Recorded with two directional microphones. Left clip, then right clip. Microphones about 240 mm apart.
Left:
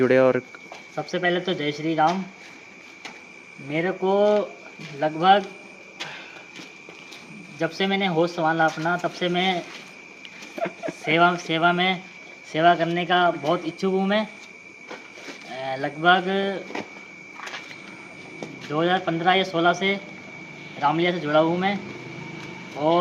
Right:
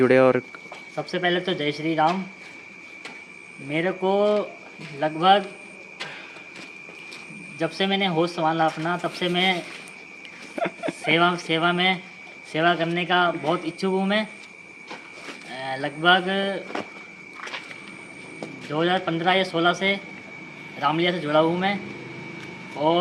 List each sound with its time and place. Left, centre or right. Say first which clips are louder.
0.0 s speech: right 1 dB; centre
3.7 s speech: even; centre
7.6 s speech: even; centre
10.5 s speech: right 2 dB; right
11.0 s speech: left 1 dB; centre
15.4 s speech: left 1 dB; centre
18.3 s speech: left 1 dB; centre
22.8 s speech: even; centre